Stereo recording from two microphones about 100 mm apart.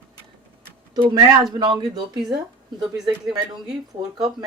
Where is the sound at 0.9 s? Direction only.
50° right (ahead or behind).